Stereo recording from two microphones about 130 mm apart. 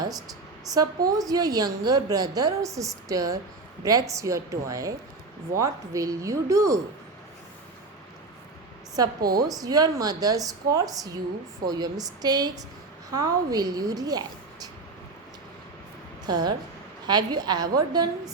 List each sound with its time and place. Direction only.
0.7 s a woman's voice: 30° right (ahead or behind)
9.0 s a woman's voice: 30° right (ahead or behind)
16.2 s a woman's voice: 30° right (ahead or behind)